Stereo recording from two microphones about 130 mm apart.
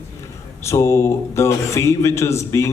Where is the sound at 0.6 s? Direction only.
20° left (ahead or behind).